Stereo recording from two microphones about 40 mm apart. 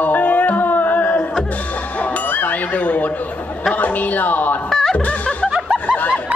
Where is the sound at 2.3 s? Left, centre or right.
Left.